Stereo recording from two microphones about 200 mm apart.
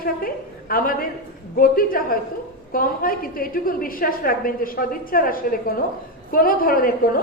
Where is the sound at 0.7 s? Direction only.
45° left (ahead or behind).